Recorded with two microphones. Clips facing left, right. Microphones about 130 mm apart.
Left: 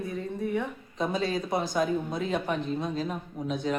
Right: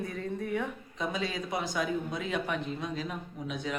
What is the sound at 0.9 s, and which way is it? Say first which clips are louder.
Speech: left 5 dB; 35° left (ahead or behind).